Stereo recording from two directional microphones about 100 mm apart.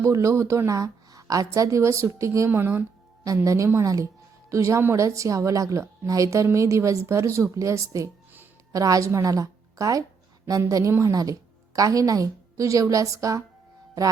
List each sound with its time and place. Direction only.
0.0 s a woman's voice: 30° right (ahead or behind)
3.2 s a woman's voice: 30° right (ahead or behind)